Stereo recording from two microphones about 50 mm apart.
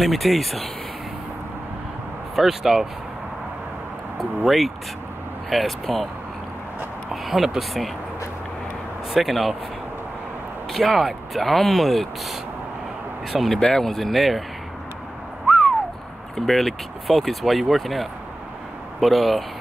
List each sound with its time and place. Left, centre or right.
0.0 s speech: centre
2.3 s speech: centre
4.5 s speech: centre
7.1 s speech: centre
9.1 s speech: centre
10.7 s speech: centre
13.6 s speech: centre
15.4 s owl: centre
16.3 s speech: centre